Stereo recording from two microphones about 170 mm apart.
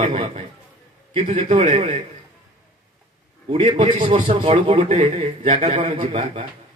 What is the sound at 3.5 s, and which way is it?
A man's voice, 30° right (ahead or behind).